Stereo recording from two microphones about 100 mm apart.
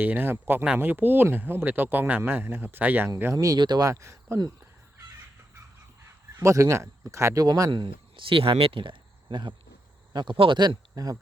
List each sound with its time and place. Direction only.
0.0 s speech: 20° right (ahead or behind)
3.3 s speech: 40° right (ahead or behind)
6.4 s speech: 30° right (ahead or behind)
7.7 s speech: 55° right (ahead or behind)
10.3 s speech: 60° right (ahead or behind)
10.9 s speech: 40° right (ahead or behind)